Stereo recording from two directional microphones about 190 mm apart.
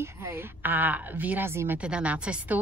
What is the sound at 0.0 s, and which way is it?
A woman's voice, 15° right (ahead or behind).